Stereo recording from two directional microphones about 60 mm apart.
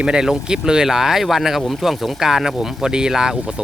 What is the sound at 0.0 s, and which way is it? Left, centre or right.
Speech, centre.